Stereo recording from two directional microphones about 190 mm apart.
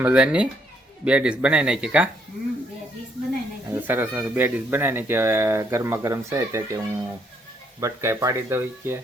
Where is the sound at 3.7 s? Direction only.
10° right (ahead or behind).